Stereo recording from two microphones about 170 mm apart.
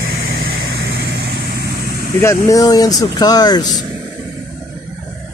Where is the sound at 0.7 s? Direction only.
90° right.